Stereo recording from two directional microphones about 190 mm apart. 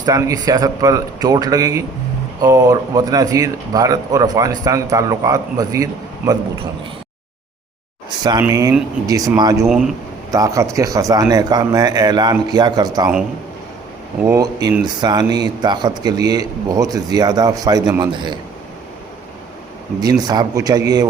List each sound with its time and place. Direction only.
0.0 s speech: 20° right (ahead or behind)
8.2 s speech: 20° right (ahead or behind)
9.6 s speech: centre (ahead or behind)
10.3 s speech: 15° right (ahead or behind)
14.3 s speech: 20° right (ahead or behind)
20.2 s speech: 20° right (ahead or behind)